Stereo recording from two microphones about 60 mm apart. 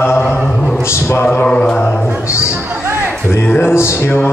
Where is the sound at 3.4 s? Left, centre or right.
Left.